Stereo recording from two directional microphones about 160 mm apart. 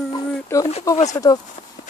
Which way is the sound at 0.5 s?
20° left (ahead or behind).